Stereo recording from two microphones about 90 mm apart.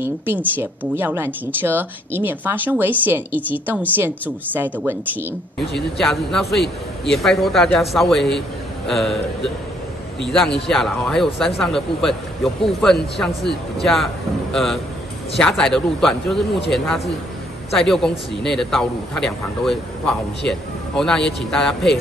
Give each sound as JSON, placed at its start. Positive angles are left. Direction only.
{"t": 0.6, "sound": "speech", "side_deg": -25}
{"t": 5.8, "sound": "a man's voice", "side_deg": 5}